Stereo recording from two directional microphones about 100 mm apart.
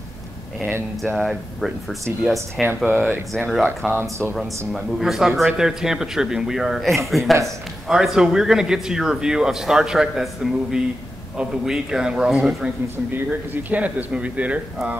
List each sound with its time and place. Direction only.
0.6 s speech: 20° right (ahead or behind)
1.1 s a man's voice: centre (ahead or behind)
3.0 s speech: 15° left (ahead or behind)
4.7 s a man's voice: centre (ahead or behind)